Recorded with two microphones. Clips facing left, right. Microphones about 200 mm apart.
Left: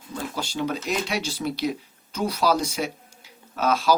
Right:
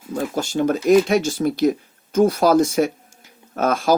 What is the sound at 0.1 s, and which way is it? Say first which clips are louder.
Speech: right 8 dB; 45° right (ahead or behind).